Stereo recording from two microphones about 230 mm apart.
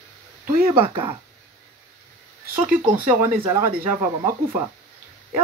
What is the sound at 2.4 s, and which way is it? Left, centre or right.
Speech, right.